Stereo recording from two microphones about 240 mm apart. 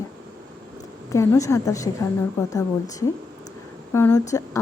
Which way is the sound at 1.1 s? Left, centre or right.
Centre.